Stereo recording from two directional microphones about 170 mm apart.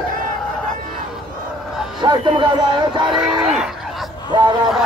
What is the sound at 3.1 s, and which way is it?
Livestock, 5° right (ahead or behind).